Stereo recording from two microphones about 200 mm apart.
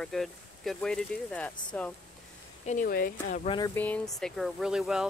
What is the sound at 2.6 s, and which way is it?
Speech, 45° left (ahead or behind).